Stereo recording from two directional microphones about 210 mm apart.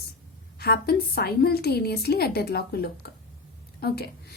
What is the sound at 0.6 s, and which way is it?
Speech, 50° left (ahead or behind).